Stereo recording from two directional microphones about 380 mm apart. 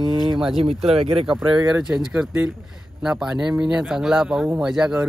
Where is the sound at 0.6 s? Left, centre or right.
Centre.